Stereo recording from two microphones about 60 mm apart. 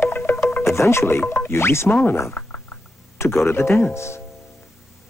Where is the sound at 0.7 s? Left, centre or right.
Left.